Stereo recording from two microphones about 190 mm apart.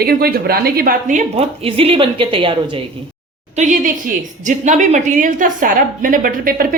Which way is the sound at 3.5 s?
40° right (ahead or behind).